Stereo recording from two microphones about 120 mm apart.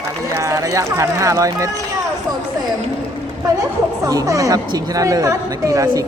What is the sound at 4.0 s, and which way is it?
A woman's voice, 30° right (ahead or behind).